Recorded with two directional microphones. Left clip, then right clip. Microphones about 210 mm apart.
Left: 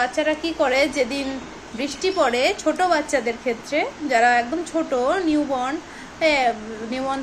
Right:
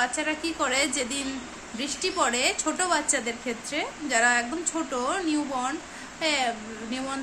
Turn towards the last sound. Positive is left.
turn(degrees=-15)  # may be behind; listen again after turning